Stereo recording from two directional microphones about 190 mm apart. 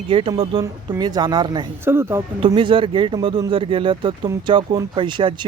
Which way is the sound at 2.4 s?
25° right (ahead or behind).